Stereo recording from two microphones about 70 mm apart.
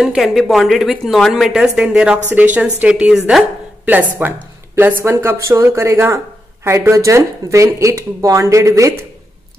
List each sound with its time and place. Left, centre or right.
0.0 s a woman's voice: centre; by 4.3 s right
4.7 s speech: right